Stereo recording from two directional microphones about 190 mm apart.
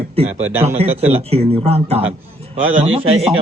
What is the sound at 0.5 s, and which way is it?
Speech, 10° right (ahead or behind).